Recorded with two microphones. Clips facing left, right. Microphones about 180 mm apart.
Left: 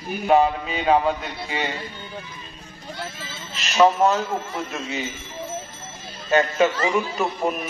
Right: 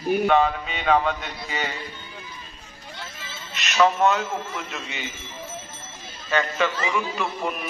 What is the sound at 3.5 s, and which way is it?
Alarm, 30° left (ahead or behind).